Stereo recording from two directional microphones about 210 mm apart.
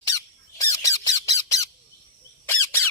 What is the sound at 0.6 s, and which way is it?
Squawk, 15° left (ahead or behind).